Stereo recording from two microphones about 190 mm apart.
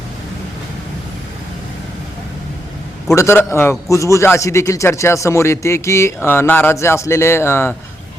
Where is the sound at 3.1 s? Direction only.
15° left (ahead or behind).